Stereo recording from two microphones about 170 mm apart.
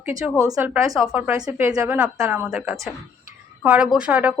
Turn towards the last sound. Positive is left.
turn(degrees=-10)  # may be behind; listen again after turning